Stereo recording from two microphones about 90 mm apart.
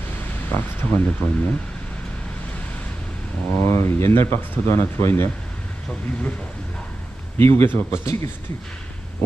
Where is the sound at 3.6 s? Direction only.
30° left (ahead or behind).